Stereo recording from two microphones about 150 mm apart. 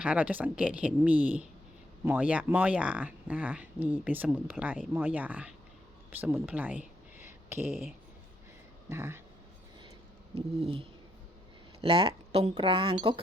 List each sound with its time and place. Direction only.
0.0 s speech: 10° right (ahead or behind)
6.1 s a sound: 10° right (ahead or behind)
7.7 s speech: 5° right (ahead or behind)
8.9 s speech: 20° right (ahead or behind)
10.3 s speech: 35° right (ahead or behind)